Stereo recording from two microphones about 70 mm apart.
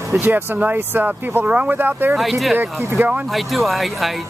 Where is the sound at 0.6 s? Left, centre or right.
Right.